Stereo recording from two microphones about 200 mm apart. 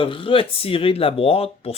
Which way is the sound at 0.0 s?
25° left (ahead or behind).